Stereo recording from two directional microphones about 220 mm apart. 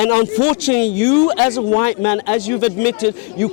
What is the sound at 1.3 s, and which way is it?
A man's voice, 15° left (ahead or behind).